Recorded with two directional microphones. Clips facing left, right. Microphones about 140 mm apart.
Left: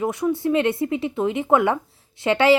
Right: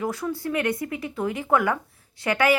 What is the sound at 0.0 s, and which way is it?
Speech, 20° left (ahead or behind).